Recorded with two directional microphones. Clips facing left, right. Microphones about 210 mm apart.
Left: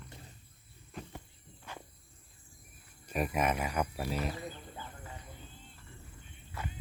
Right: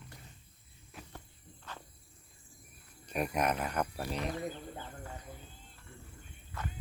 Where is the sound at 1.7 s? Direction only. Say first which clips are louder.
Left 1 dB; 10° left (ahead or behind).